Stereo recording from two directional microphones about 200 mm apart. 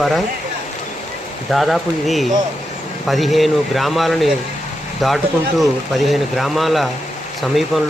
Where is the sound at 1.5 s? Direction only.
Centre (ahead or behind).